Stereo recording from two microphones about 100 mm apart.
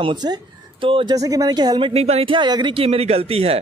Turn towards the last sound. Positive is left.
turn(degrees=-85)